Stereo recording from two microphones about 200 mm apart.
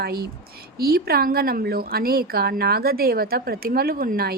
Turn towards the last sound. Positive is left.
turn(degrees=-45)  # may be behind; listen again after turning